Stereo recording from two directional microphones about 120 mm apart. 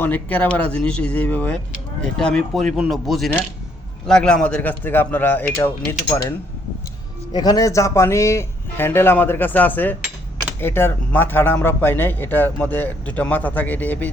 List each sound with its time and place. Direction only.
0.0 s speech: 15° left (ahead or behind)
7.3 s speech: 35° left (ahead or behind); by 14.1 s 15° left (ahead or behind)